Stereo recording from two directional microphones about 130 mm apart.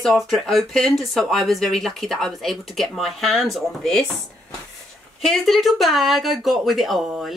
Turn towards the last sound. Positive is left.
turn(degrees=0)  # may be behind; listen again after turning